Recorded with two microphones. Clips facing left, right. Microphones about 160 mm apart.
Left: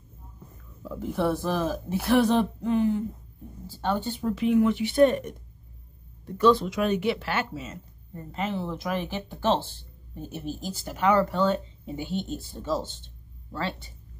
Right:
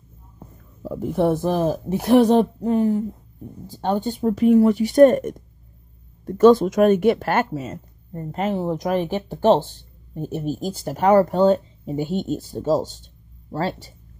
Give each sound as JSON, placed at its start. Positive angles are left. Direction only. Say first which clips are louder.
{"t": 0.8, "sound": "speech", "louder": "right 6 dB", "side_deg": -45}
{"t": 4.0, "sound": "speech", "louder": "right 8 dB", "side_deg": -45}